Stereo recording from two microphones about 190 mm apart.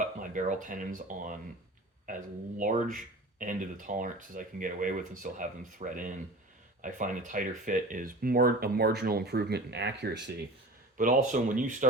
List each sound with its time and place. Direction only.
0.2 s speech: 45° right (ahead or behind); by 10.3 s 65° right (ahead or behind)
10.9 s speech: 45° right (ahead or behind)